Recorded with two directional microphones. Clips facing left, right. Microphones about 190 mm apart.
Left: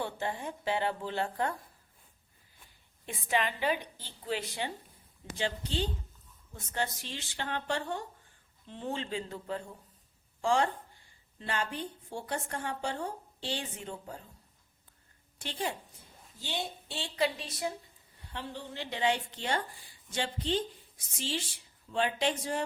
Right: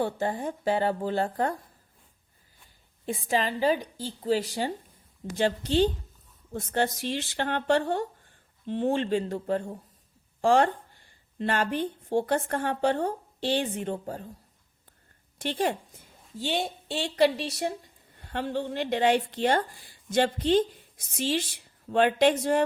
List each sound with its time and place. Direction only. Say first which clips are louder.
0.0 s a woman's voice: right 7 dB; 40° right (ahead or behind)
3.1 s a woman's voice: right 4 dB; 35° right (ahead or behind)
5.6 s a woman's voice: right 11 dB; 75° right (ahead or behind)
8.6 s a woman's voice: right 11 dB; 70° right (ahead or behind); by 14.3 s 50° right (ahead or behind)
16.4 s a woman's voice: right 8 dB; 75° right (ahead or behind)